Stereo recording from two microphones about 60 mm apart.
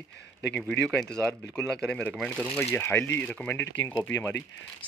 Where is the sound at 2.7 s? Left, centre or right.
Left.